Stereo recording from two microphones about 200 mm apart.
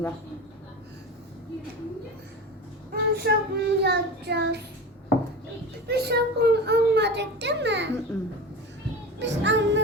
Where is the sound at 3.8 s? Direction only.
55° right (ahead or behind).